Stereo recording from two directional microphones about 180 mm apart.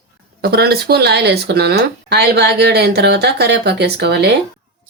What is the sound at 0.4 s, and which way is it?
Speech, 60° right (ahead or behind).